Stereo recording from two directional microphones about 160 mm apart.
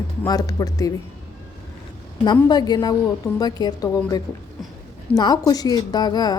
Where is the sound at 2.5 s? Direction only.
25° left (ahead or behind).